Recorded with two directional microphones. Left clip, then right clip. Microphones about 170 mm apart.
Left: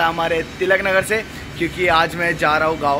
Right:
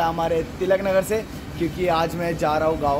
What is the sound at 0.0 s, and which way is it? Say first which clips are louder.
Speech: left 3 dB; centre (ahead or behind).